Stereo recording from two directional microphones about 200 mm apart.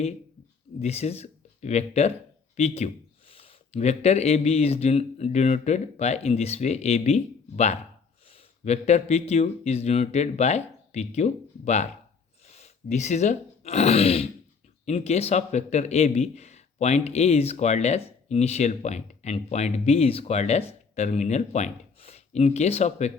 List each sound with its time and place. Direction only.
0.8 s speech: 30° left (ahead or behind)